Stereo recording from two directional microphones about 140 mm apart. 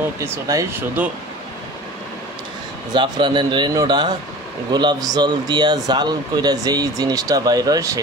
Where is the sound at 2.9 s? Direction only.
35° right (ahead or behind).